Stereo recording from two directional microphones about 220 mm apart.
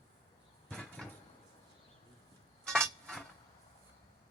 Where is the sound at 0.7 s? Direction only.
5° left (ahead or behind).